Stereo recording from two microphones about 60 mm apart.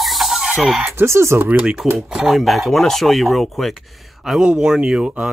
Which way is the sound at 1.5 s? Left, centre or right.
Right.